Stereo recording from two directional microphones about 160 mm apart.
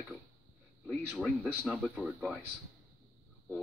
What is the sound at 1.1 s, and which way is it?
A man's voice, 5° right (ahead or behind).